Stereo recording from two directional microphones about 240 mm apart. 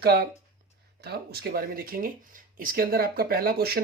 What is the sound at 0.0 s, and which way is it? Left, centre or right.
Speech, right.